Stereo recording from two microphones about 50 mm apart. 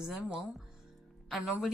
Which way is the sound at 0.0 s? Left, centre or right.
Centre.